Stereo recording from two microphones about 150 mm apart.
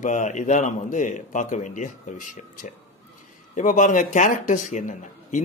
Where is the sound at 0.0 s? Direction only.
55° left (ahead or behind).